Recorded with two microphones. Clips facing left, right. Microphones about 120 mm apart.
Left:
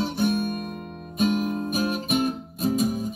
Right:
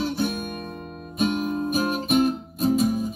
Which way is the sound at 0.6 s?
35° right (ahead or behind).